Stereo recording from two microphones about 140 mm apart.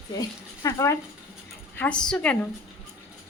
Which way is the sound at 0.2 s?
25° left (ahead or behind).